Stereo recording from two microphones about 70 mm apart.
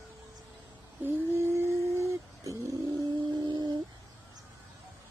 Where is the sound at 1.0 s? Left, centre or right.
Right.